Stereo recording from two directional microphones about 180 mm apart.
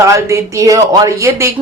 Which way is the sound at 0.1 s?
15° right (ahead or behind).